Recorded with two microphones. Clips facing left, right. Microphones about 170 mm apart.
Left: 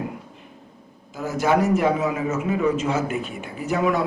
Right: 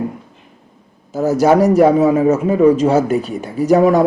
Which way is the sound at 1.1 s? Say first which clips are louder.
Right 9 dB; 40° right (ahead or behind).